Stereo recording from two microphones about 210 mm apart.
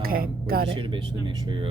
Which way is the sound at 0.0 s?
45° right (ahead or behind).